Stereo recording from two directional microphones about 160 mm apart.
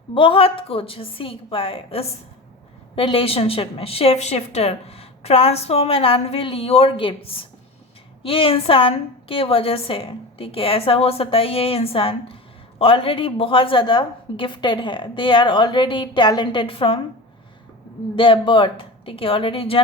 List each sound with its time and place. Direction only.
0.1 s a woman's voice: 35° left (ahead or behind)
18.2 s a woman's voice: 30° left (ahead or behind)